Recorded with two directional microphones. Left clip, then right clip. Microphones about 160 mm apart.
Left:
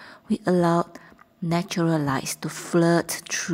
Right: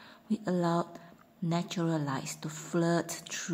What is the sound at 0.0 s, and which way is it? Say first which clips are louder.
A woman's voice: left 9 dB; 35° left (ahead or behind).